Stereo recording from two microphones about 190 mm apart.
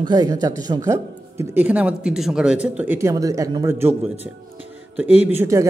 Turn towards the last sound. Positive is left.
turn(degrees=-15)  # may be behind; listen again after turning